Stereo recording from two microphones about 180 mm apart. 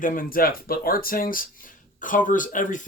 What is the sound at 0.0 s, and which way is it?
Speech, 50° left (ahead or behind).